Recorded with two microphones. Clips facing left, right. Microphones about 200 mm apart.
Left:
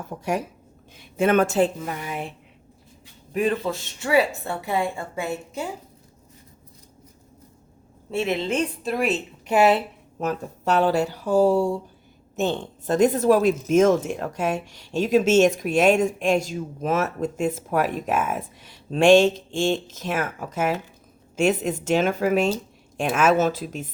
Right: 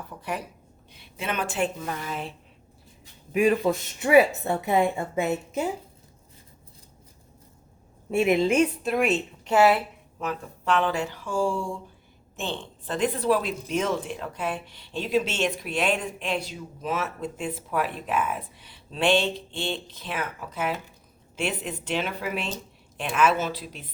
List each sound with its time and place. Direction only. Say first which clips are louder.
0.0 s a woman's voice: left 7 dB; 45° left (ahead or behind)
1.8 s a woman's voice: left 2 dB; 15° left (ahead or behind)
3.3 s speech: right 2 dB; 10° right (ahead or behind)
8.1 s a woman's voice: right 3 dB; 15° right (ahead or behind); by 9.6 s 5° left (ahead or behind)
9.6 s a woman's voice: left 1 dB; 20° left (ahead or behind)
10.2 s speech: left 5 dB; 40° left (ahead or behind)